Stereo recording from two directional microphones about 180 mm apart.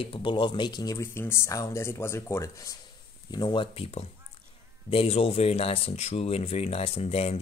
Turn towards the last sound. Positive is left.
turn(degrees=35)  # may be behind; listen again after turning